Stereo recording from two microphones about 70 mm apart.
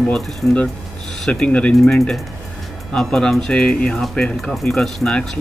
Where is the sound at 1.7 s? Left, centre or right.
Centre.